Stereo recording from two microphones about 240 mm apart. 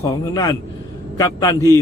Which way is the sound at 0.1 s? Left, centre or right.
Centre.